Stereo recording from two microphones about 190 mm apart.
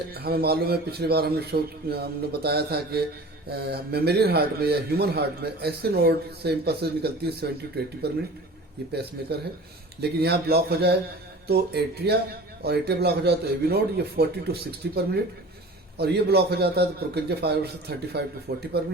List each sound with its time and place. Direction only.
0.1 s a man's voice: 55° right (ahead or behind)